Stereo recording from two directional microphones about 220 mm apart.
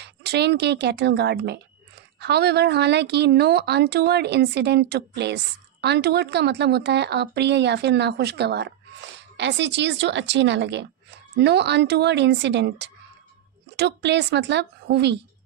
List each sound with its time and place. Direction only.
0.0 s a woman's voice: 50° right (ahead or behind)